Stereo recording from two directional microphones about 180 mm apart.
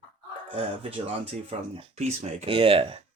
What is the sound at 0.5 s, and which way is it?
Speech, 30° right (ahead or behind).